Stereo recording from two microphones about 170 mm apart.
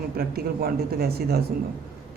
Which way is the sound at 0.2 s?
65° right (ahead or behind).